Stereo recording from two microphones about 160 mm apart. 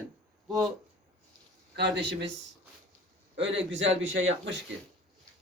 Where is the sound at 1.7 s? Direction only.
90° right.